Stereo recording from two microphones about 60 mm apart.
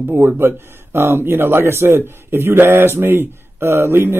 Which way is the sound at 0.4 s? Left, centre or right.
Right.